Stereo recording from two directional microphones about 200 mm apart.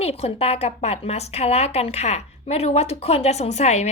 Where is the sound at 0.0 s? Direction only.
30° left (ahead or behind).